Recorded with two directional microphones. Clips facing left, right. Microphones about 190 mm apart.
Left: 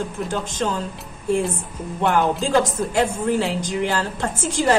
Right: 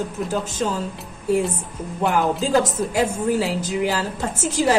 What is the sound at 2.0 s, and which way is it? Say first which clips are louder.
Speech: left 1 dB; 5° right (ahead or behind).